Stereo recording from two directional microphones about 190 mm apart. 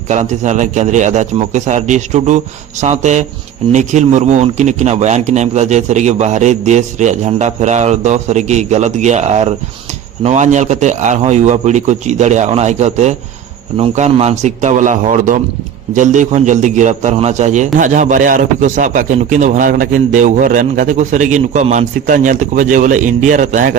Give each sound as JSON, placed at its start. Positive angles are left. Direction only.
{"t": 0.1, "sound": "a man's voice", "side_deg": -40}